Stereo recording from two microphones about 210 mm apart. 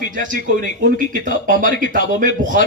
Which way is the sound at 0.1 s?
40° right (ahead or behind).